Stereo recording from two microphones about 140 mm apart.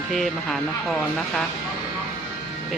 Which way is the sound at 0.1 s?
Centre (ahead or behind).